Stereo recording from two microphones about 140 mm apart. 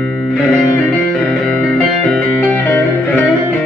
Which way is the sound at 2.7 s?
15° left (ahead or behind).